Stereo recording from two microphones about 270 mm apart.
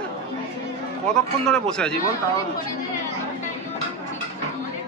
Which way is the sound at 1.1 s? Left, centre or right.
Centre.